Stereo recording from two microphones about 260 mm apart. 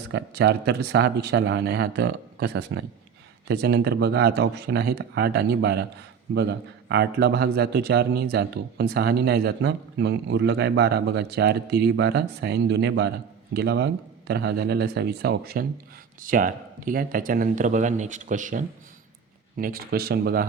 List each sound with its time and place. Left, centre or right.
0.1 s a man's voice: right